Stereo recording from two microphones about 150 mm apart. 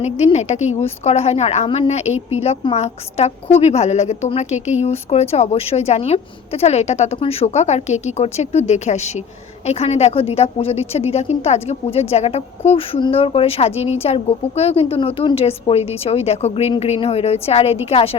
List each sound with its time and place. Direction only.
0.0 s a woman's voice: 45° left (ahead or behind)